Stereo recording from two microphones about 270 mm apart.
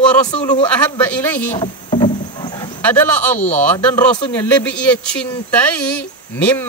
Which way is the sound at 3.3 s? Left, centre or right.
Left.